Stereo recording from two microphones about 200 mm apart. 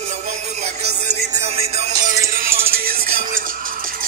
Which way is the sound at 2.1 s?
45° right (ahead or behind).